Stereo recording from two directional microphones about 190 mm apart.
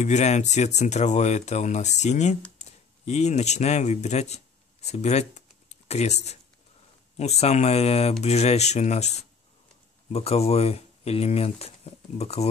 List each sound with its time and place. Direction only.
0.0 s speech: 35° left (ahead or behind)
10.1 s speech: 35° left (ahead or behind)